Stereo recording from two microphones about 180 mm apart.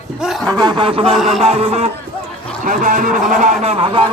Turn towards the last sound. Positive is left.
turn(degrees=-30)  # may be behind; listen again after turning